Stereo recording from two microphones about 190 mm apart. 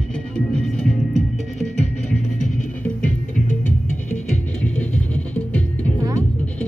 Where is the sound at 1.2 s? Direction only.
35° left (ahead or behind).